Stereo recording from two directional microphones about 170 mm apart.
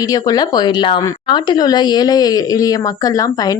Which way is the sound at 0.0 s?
20° left (ahead or behind).